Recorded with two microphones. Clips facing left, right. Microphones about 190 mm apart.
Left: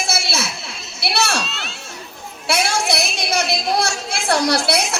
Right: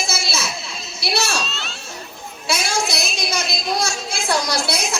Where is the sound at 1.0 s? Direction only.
65° left (ahead or behind).